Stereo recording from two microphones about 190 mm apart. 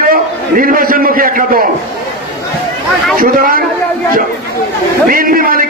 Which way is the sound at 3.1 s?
50° right (ahead or behind).